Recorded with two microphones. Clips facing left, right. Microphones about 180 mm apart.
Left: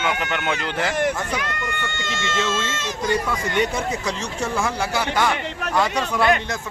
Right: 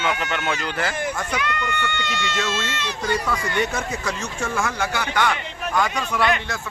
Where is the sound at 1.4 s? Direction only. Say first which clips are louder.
Right 2 dB; 45° left (ahead or behind).